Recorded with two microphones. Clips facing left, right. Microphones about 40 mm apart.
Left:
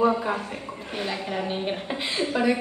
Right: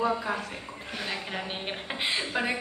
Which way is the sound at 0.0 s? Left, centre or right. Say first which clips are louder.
Left 5 dB; centre.